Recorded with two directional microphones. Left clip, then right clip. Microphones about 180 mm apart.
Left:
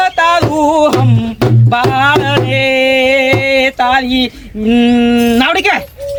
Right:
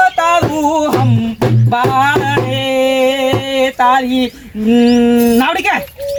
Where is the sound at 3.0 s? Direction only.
35° left (ahead or behind).